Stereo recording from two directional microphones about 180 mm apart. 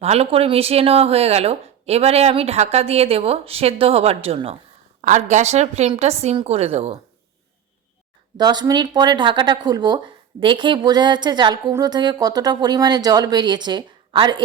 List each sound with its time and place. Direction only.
0.0 s speech: 35° right (ahead or behind)
8.4 s speech: 20° right (ahead or behind)